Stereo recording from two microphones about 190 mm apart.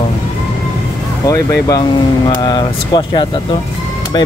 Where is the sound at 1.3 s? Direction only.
20° left (ahead or behind).